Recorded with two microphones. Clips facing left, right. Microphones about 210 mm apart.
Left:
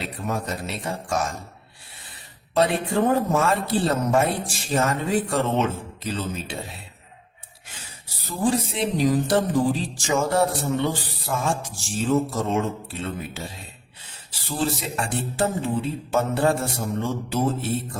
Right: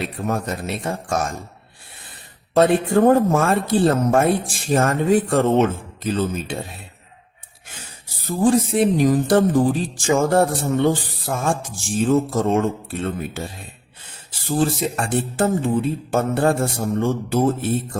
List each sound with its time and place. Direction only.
0.2 s speech: 50° right (ahead or behind)
2.6 s speech: 50° right (ahead or behind)
8.1 s speech: 50° right (ahead or behind)